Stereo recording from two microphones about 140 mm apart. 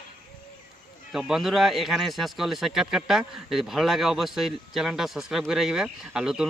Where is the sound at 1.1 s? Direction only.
Centre (ahead or behind).